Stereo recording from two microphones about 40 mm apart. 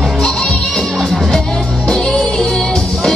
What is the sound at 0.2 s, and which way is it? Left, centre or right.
Music, centre.